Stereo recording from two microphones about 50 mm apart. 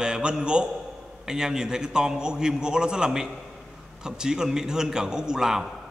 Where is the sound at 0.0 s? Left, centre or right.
Centre.